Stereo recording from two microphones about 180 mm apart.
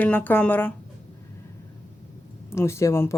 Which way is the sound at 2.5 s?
15° left (ahead or behind).